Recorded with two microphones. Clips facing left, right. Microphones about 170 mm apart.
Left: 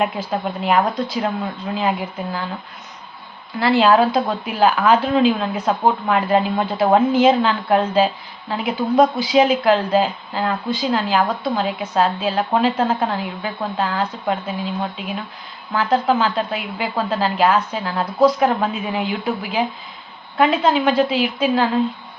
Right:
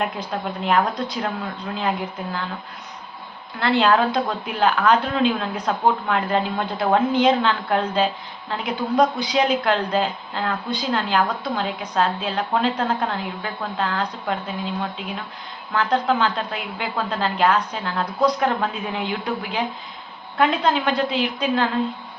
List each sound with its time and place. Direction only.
0.0 s speech: 5° left (ahead or behind)
3.6 s speech: 5° left (ahead or behind)
15.7 s speech: 5° left (ahead or behind)